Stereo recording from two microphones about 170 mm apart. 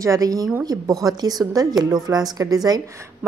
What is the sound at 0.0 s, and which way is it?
A woman's voice, 20° right (ahead or behind).